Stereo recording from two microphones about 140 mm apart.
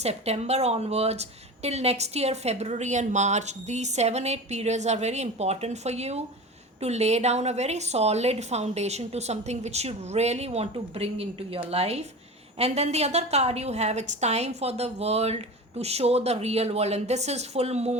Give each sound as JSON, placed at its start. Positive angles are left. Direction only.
{"t": 0.0, "sound": "a woman's voice", "side_deg": -50}